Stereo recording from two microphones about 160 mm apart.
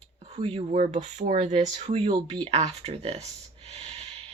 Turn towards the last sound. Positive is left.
turn(degrees=-40)  # may be behind; listen again after turning